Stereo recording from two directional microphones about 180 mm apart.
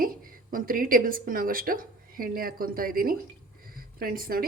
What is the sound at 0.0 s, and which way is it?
A woman's voice, 50° right (ahead or behind).